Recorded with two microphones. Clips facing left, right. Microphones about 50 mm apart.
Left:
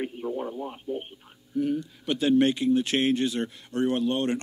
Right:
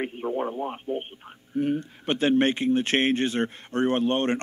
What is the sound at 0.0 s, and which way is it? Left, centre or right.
Speech, right.